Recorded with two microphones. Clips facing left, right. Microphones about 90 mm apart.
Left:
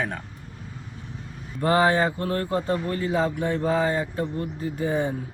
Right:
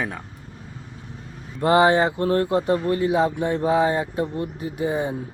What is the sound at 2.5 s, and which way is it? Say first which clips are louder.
Speech: right 5 dB; 20° right (ahead or behind).